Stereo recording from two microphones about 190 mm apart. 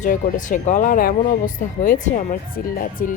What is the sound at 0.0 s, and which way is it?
Speech, 40° left (ahead or behind).